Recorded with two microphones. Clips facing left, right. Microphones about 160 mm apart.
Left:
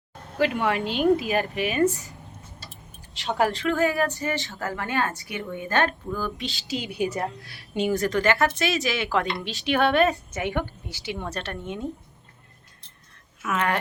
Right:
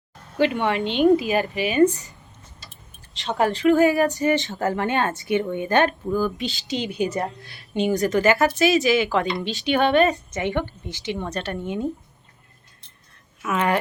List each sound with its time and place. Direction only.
0.3 s speech: centre (ahead or behind)
3.2 s speech: centre (ahead or behind)
3.7 s a woman's voice: 15° right (ahead or behind)
6.1 s speech: 5° right (ahead or behind)
13.4 s speech: 5° right (ahead or behind)